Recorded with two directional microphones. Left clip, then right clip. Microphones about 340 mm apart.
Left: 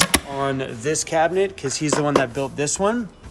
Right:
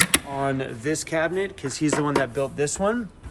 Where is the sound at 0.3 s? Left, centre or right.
Centre.